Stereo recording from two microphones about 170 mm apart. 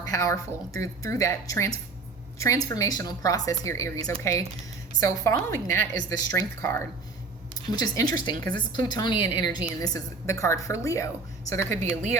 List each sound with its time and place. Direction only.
0.0 s a woman's voice: 20° left (ahead or behind)